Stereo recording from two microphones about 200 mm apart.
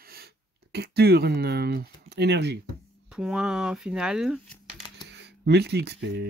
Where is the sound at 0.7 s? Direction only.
55° right (ahead or behind).